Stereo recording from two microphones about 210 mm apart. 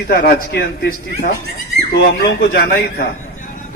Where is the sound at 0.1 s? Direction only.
45° left (ahead or behind).